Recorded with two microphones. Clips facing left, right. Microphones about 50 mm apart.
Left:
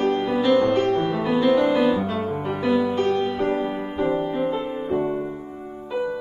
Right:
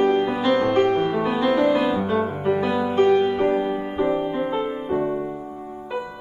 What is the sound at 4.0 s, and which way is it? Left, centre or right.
Music, centre.